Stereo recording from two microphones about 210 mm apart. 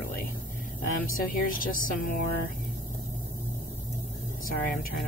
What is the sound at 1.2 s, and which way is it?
Speech, 40° left (ahead or behind).